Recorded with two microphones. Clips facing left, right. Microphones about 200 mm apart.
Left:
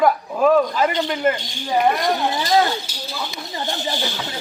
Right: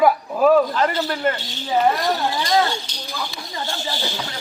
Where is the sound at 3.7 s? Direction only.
15° left (ahead or behind).